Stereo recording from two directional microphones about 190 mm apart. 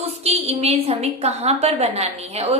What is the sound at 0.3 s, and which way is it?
A woman's voice, 35° right (ahead or behind).